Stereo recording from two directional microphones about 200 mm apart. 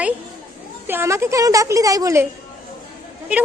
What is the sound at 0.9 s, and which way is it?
A woman's voice, 10° right (ahead or behind).